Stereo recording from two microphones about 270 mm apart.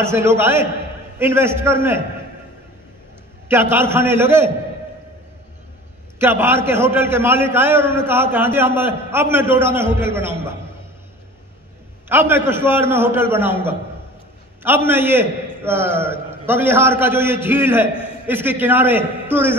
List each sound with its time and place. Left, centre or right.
0.0 s a man's voice: centre
3.4 s a man's voice: centre
6.1 s a man's voice: centre
12.1 s a man's voice: centre